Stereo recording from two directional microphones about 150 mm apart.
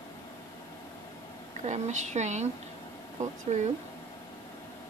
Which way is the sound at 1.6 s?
50° right (ahead or behind).